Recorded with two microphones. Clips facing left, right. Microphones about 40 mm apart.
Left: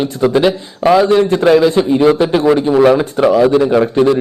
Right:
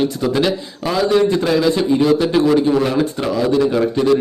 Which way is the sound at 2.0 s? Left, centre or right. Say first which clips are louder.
Left 5 dB; left.